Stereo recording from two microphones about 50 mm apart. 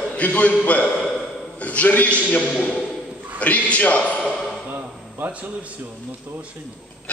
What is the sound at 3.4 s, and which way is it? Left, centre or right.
Speech, left.